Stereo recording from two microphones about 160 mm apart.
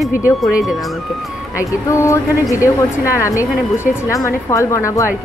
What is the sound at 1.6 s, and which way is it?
Music, 20° left (ahead or behind).